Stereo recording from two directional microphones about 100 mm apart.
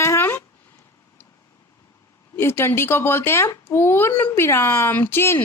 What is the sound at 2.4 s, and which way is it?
Speech, 25° left (ahead or behind).